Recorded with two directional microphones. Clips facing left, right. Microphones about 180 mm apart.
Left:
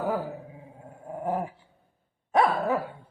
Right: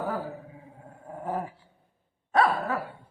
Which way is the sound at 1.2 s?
15° left (ahead or behind).